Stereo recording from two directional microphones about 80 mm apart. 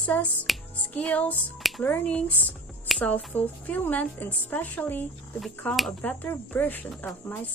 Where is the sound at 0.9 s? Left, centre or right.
Centre.